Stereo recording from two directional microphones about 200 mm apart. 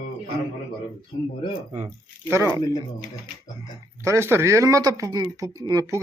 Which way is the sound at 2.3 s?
15° right (ahead or behind).